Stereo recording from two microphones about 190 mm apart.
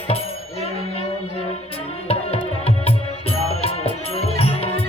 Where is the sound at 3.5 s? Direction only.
30° left (ahead or behind).